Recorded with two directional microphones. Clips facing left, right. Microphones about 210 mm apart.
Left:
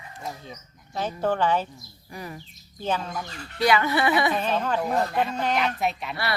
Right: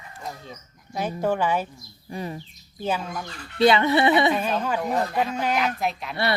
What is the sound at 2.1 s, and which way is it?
Speech, 25° right (ahead or behind).